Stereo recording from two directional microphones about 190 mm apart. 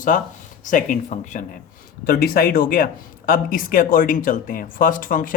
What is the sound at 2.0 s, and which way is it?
Speech, 50° left (ahead or behind).